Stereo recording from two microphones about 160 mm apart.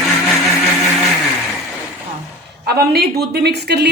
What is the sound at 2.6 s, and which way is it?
A woman's voice, 80° right.